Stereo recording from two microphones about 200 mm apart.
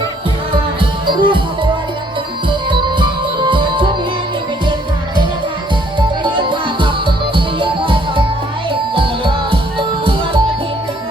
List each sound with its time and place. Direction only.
0.8 s music: 25° right (ahead or behind)
2.5 s music: 25° right (ahead or behind)
6.0 s music: 25° right (ahead or behind)